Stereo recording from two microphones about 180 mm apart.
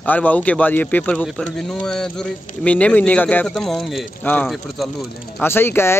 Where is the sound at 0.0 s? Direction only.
10° left (ahead or behind).